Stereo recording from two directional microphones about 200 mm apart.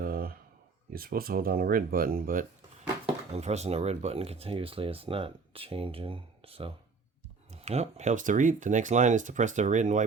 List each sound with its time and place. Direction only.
0.0 s a sound: 45° right (ahead or behind)
0.9 s speech: 50° right (ahead or behind)
3.3 s speech: 35° right (ahead or behind)